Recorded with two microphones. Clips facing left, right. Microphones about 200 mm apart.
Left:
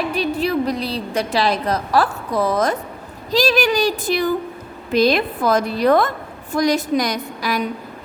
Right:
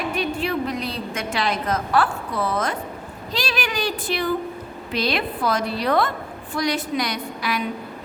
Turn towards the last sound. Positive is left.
turn(degrees=40)  # may be behind; listen again after turning